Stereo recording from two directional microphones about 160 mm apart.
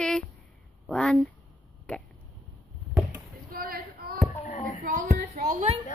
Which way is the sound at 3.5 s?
65° right (ahead or behind).